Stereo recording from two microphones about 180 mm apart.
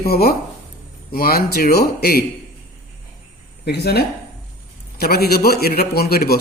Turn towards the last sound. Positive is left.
turn(degrees=60)  # may be behind; listen again after turning